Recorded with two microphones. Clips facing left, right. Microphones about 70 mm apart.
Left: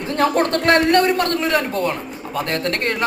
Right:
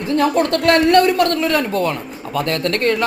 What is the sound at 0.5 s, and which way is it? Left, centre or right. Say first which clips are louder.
A man's voice: right 4 dB; left.